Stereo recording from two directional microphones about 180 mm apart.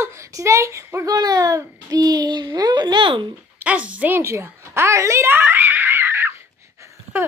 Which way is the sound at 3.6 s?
5° right (ahead or behind).